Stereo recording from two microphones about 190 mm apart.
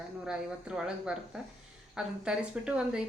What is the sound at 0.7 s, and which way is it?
Speech, 5° right (ahead or behind).